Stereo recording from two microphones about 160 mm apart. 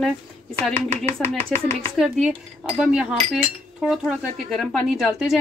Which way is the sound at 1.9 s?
5° right (ahead or behind).